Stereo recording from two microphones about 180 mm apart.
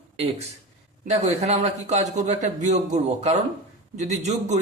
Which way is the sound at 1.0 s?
35° right (ahead or behind).